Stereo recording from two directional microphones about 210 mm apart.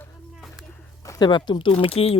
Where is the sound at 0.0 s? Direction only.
Centre (ahead or behind).